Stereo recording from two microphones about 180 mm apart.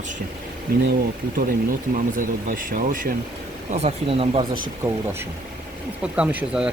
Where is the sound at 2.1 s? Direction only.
50° right (ahead or behind).